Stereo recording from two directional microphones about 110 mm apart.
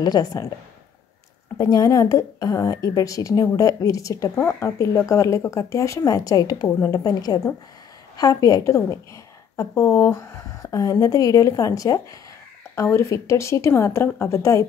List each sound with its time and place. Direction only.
0.0 s a woman's voice: 35° left (ahead or behind)
1.6 s a woman's voice: 35° left (ahead or behind)